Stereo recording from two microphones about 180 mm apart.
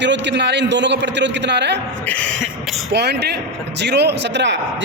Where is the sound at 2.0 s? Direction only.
5° left (ahead or behind).